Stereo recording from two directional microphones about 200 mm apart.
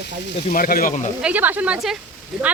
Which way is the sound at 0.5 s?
45° left (ahead or behind).